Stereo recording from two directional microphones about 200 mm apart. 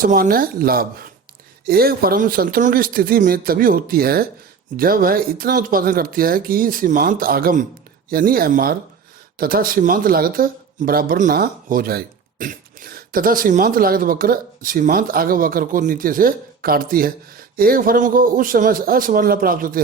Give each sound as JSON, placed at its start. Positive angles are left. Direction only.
{"t": 0.0, "sound": "speech", "side_deg": -45}